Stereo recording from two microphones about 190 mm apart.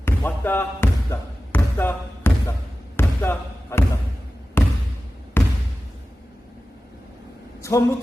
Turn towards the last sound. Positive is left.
turn(degrees=15)  # may be behind; listen again after turning